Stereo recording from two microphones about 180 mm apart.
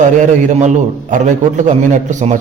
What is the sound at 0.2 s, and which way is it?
A man's voice, 45° right (ahead or behind).